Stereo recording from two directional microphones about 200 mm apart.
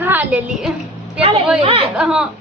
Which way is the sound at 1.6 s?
30° right (ahead or behind).